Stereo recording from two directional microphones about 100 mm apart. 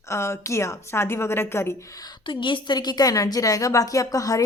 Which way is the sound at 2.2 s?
55° left (ahead or behind).